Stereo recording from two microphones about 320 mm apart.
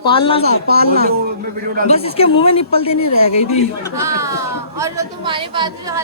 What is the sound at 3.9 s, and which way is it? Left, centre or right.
A woman's voice, centre.